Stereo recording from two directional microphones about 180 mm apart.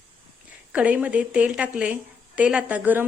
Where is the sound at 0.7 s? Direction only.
5° right (ahead or behind).